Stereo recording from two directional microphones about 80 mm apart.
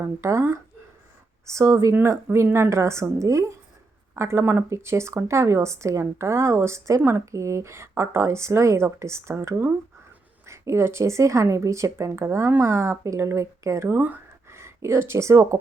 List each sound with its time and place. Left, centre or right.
0.0 s speech: right
13.8 s speech: right
14.5 s speech: right